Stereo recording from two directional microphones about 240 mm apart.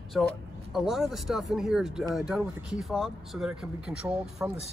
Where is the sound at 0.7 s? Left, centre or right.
Centre.